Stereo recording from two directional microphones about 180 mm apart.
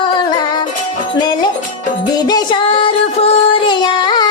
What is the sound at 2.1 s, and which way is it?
Child singing, 20° left (ahead or behind).